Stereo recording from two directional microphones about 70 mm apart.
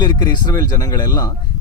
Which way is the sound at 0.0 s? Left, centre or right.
Left.